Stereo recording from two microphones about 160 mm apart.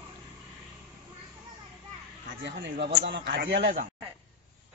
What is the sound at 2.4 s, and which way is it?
Speech, 90° right.